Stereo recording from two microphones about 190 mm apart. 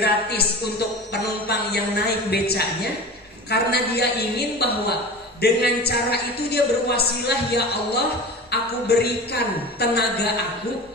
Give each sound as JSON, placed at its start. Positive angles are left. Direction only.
{"t": 0.0, "sound": "a man's voice", "side_deg": 60}